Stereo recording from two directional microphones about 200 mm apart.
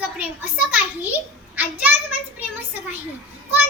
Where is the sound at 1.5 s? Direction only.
10° right (ahead or behind).